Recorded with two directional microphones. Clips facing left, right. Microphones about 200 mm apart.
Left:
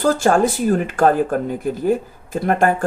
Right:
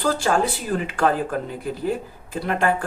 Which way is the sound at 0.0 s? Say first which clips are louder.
Left 5 dB; 45° left (ahead or behind).